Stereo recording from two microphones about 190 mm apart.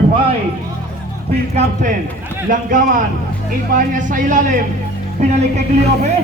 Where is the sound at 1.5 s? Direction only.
40° right (ahead or behind).